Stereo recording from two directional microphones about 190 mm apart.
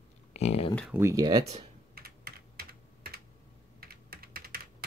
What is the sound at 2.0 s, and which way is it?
Typing, 55° right (ahead or behind).